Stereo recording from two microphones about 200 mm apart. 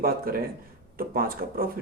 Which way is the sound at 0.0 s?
45° right (ahead or behind).